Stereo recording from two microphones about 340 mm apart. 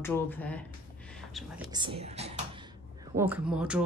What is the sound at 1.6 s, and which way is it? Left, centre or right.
Speech, centre.